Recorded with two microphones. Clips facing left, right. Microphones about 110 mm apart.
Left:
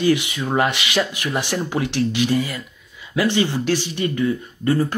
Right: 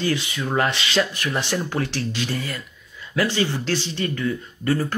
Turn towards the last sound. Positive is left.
turn(degrees=20)  # may be behind; listen again after turning